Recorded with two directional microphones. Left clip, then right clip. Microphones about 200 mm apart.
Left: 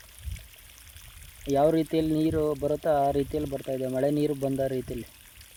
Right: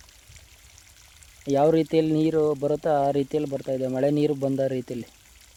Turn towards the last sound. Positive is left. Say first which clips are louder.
# right 3 dB
turn(degrees=-30)  # may be behind; listen again after turning